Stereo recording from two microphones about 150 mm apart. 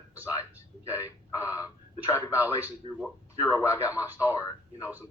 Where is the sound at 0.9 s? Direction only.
20° left (ahead or behind).